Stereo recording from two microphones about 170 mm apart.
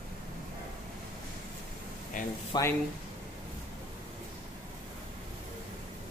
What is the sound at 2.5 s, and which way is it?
Speech, 15° left (ahead or behind).